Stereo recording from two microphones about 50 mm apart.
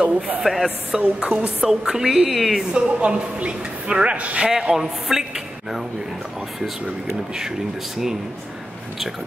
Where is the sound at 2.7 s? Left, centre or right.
Right.